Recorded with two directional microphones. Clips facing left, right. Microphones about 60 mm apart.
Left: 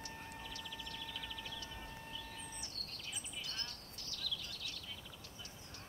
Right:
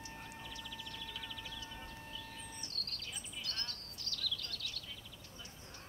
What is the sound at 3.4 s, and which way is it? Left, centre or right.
Chirp, centre.